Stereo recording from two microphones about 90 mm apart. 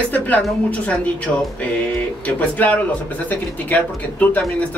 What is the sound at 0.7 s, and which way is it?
A woman's voice, 15° left (ahead or behind).